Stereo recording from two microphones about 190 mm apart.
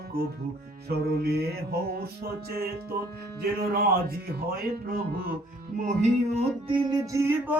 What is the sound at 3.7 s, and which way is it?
Speech, 50° right (ahead or behind).